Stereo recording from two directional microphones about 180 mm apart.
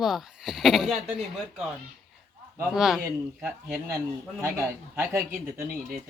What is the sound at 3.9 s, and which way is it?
A man's voice, 15° right (ahead or behind).